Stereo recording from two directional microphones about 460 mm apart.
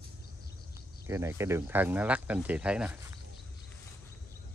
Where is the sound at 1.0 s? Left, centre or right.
Centre.